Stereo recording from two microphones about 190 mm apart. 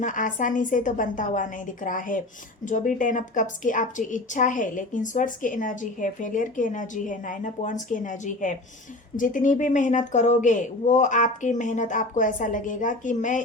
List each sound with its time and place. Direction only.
0.0 s a woman's voice: 45° left (ahead or behind)